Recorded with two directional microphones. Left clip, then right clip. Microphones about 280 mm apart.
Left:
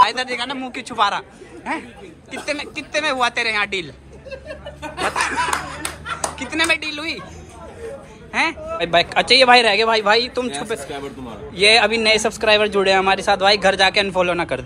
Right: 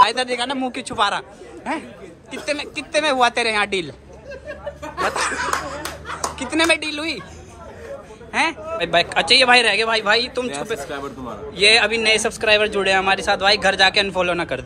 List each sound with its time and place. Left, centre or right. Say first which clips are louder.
0.0 s a man's voice: even; centre
5.0 s a man's voice: left 1 dB; centre
8.3 s a man's voice: even; centre